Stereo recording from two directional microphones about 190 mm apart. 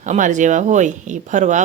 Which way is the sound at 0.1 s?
40° right (ahead or behind).